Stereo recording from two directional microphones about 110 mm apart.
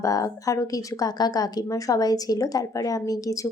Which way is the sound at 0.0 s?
30° left (ahead or behind).